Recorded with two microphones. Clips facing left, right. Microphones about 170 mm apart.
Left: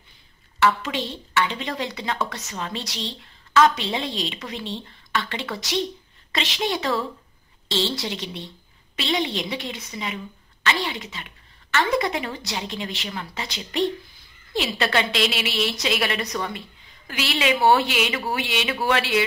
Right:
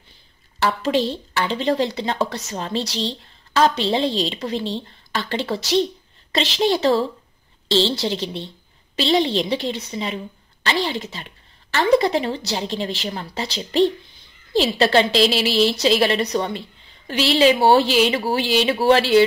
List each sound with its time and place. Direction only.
0.6 s speech: 35° right (ahead or behind)